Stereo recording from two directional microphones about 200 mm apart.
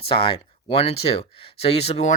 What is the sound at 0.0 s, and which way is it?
Speech, 30° left (ahead or behind).